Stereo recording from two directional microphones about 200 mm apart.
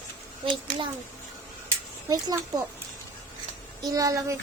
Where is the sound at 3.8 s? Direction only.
20° right (ahead or behind).